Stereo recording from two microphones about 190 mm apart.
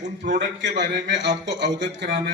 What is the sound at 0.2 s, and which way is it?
Speech, 65° right (ahead or behind).